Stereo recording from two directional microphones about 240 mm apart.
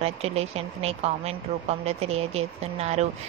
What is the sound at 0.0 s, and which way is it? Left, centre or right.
Speech, right.